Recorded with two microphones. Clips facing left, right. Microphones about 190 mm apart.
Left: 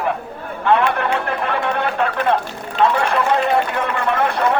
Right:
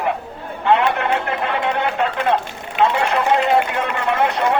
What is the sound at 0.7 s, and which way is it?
Speech, 20° right (ahead or behind).